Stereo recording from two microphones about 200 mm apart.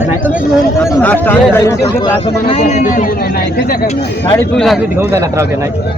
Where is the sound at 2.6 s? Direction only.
40° left (ahead or behind).